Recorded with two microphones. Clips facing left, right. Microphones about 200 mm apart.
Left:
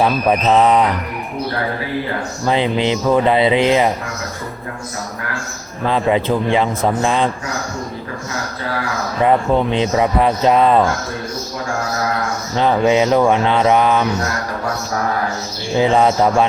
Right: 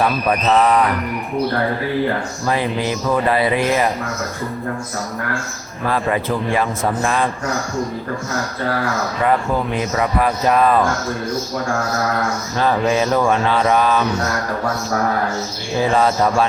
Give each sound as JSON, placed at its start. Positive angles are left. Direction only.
{"t": 0.0, "sound": "speech", "side_deg": 15}
{"t": 2.5, "sound": "speech", "side_deg": 20}
{"t": 5.8, "sound": "speech", "side_deg": 20}
{"t": 9.2, "sound": "speech", "side_deg": 25}
{"t": 12.5, "sound": "speech", "side_deg": 20}
{"t": 15.8, "sound": "speech", "side_deg": 20}